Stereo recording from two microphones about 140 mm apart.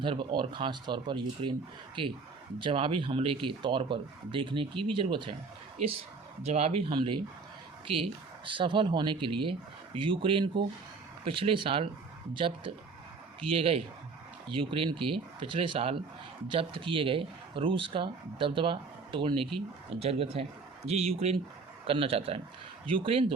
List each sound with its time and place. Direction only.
0.0 s speech: 35° right (ahead or behind)
2.6 s speech: 35° right (ahead or behind)
6.5 s speech: 45° right (ahead or behind)
8.4 s a man's voice: 35° right (ahead or behind)